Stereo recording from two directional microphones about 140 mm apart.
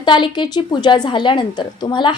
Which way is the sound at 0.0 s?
35° left (ahead or behind).